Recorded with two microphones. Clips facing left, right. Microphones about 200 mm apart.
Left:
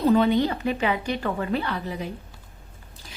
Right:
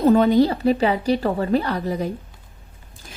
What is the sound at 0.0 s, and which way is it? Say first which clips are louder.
A woman's voice: right 5 dB; 45° right (ahead or behind).